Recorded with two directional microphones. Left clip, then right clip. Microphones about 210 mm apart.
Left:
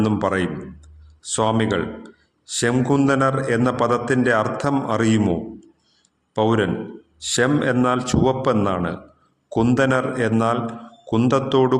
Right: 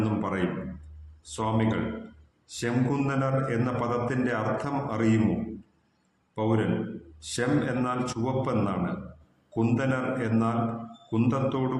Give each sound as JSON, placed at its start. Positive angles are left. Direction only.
{"t": 0.0, "sound": "a man's voice", "side_deg": 45}
{"t": 6.3, "sound": "a man's voice", "side_deg": 50}